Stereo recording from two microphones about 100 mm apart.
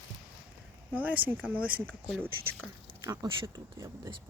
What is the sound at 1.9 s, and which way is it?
Speech, 5° left (ahead or behind).